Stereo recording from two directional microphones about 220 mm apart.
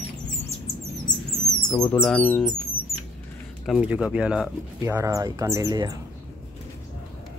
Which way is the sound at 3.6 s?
5° right (ahead or behind).